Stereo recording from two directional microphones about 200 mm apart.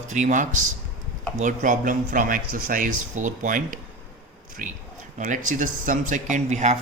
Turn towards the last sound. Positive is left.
turn(degrees=-35)  # may be behind; listen again after turning